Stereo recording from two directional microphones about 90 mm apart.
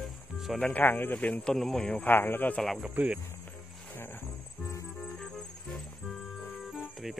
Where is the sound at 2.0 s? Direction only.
25° left (ahead or behind).